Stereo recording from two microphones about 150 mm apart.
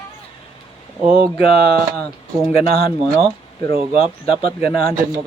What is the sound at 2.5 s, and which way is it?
Speech, 40° left (ahead or behind).